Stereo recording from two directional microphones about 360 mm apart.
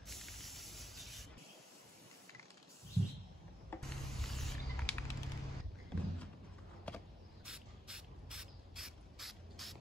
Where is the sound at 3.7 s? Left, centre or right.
Centre.